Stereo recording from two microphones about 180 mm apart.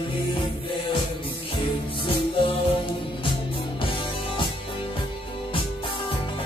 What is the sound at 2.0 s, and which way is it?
Music, 30° left (ahead or behind).